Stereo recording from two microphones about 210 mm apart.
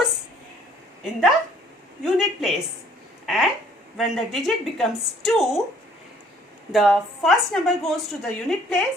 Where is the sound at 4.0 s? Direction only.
Centre (ahead or behind).